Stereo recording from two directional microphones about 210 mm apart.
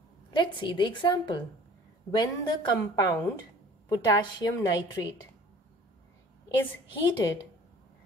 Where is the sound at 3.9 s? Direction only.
20° left (ahead or behind).